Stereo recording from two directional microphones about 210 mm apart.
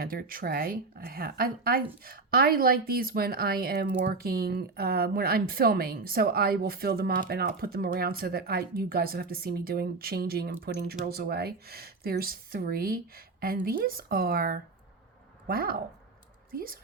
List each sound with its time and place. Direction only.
0.0 s speech: 45° right (ahead or behind)